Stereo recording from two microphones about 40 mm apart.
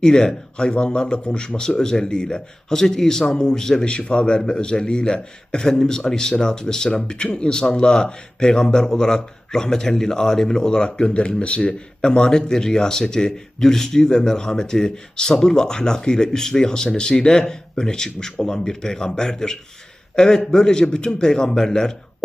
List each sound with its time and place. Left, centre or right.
0.0 s a man's voice: centre
3.9 s a man's voice: left